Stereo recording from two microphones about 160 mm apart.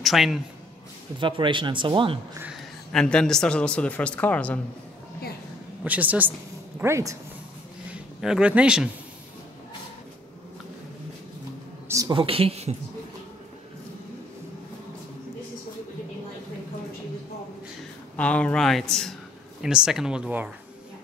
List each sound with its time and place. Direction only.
0.0 s a man's voice: centre (ahead or behind)
1.2 s speech: 30° right (ahead or behind)
2.5 s speech: 5° left (ahead or behind)
5.9 s a woman's voice: 10° right (ahead or behind)
7.9 s a man's voice: 5° right (ahead or behind)
11.9 s a sound: 20° right (ahead or behind)
12.2 s speech: 35° right (ahead or behind)
18.1 s speech: 10° left (ahead or behind); by 20.5 s 10° right (ahead or behind)